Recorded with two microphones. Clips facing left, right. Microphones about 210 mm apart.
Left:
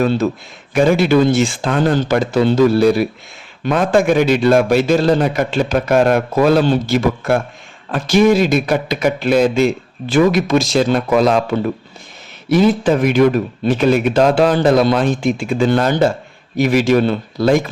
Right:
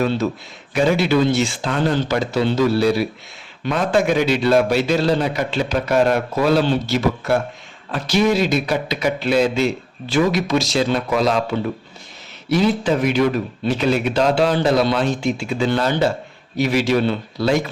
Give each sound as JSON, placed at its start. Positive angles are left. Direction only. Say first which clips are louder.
{"t": 0.7, "sound": "speech", "louder": "left 4 dB", "side_deg": 50}